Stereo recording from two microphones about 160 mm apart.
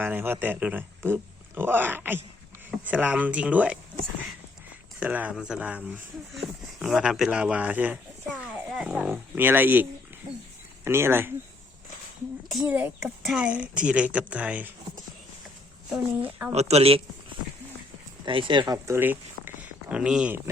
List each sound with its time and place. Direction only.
0.0 s speech: 10° right (ahead or behind)
4.9 s speech: 10° right (ahead or behind)
10.8 s speech: 15° right (ahead or behind)
12.5 s speech: 10° right (ahead or behind)
15.9 s speech: 5° right (ahead or behind)
16.5 s speech: 40° right (ahead or behind)
18.3 s speech: 30° right (ahead or behind); by 20.4 s 5° right (ahead or behind)